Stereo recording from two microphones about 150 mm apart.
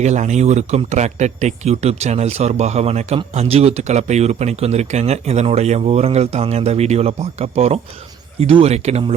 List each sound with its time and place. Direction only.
0.0 s speech: 50° right (ahead or behind)